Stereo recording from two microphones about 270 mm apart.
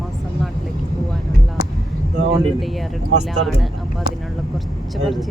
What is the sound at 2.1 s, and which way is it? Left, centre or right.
Speech, right.